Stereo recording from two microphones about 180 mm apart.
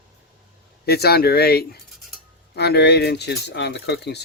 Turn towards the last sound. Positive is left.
turn(degrees=65)  # may be behind; listen again after turning